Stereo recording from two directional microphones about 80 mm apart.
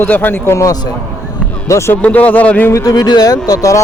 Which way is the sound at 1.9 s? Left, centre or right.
Centre.